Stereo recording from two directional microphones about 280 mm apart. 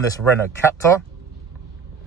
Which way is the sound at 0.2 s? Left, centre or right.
Centre.